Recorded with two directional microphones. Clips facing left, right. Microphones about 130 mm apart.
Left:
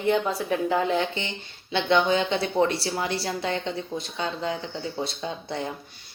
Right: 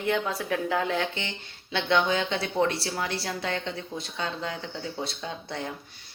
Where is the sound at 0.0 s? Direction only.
Centre (ahead or behind).